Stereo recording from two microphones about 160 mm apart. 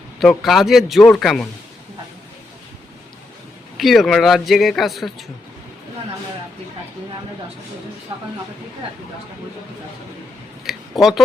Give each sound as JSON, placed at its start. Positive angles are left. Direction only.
{"t": 0.2, "sound": "speech", "side_deg": 0}
{"t": 3.8, "sound": "speech", "side_deg": 0}
{"t": 8.1, "sound": "speech", "side_deg": -30}
{"t": 10.6, "sound": "a sound", "side_deg": 0}